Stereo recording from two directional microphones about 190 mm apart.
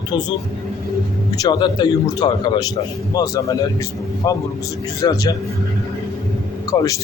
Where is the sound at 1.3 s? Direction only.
20° left (ahead or behind).